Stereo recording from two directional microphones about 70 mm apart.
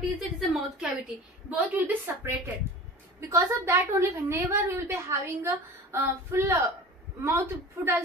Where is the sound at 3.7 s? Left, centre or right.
Right.